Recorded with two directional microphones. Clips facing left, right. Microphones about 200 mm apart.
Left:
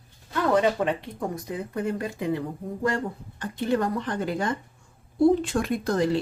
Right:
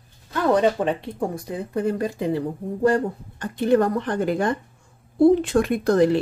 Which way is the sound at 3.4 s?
55° right (ahead or behind).